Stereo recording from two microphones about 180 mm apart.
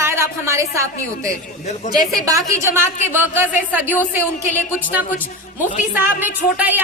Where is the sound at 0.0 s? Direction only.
15° right (ahead or behind).